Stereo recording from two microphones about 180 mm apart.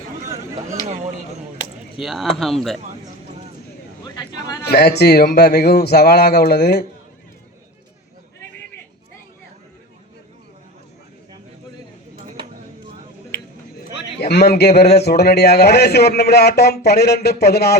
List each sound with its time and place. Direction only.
2.0 s speech: centre (ahead or behind)
4.6 s speech: 65° left (ahead or behind)
14.2 s speech: 65° left (ahead or behind)